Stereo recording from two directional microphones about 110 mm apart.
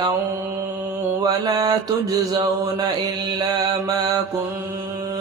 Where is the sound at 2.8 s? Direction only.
45° right (ahead or behind).